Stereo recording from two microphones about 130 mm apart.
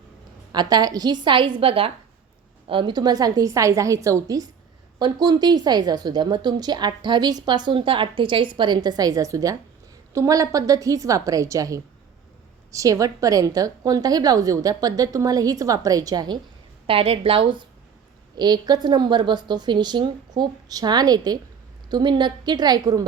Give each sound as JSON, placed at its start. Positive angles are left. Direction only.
{"t": 0.5, "sound": "a woman's voice", "side_deg": -30}
{"t": 16.8, "sound": "a woman's voice", "side_deg": -45}